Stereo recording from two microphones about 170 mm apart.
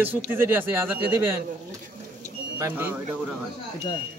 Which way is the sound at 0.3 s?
10° right (ahead or behind).